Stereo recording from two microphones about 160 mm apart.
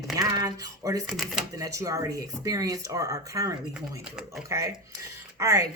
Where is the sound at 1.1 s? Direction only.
Centre (ahead or behind).